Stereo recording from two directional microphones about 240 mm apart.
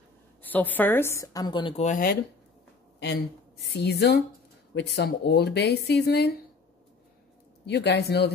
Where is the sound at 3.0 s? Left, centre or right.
Left.